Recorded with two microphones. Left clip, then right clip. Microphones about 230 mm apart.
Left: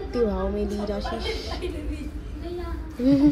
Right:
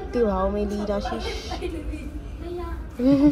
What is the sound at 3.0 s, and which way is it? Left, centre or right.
Music, centre.